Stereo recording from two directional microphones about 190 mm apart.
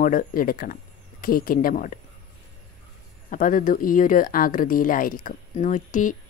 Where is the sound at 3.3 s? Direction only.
45° left (ahead or behind).